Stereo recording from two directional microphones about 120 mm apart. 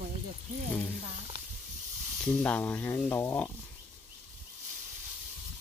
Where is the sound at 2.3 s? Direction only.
15° left (ahead or behind).